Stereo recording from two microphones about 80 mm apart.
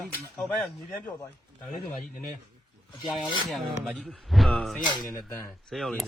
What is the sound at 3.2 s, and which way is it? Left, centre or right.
Filing, left.